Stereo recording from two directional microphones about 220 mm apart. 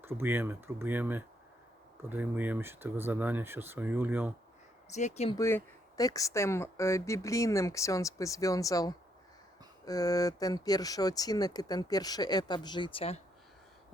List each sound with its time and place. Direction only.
0.0 s speech: 10° right (ahead or behind)
4.9 s speech: 30° left (ahead or behind)
5.4 s speech: 10° left (ahead or behind)